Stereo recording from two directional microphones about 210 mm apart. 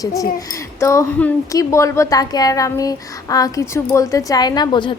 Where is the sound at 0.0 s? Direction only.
15° left (ahead or behind).